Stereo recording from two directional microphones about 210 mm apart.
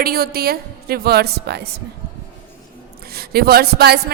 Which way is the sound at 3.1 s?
45° right (ahead or behind).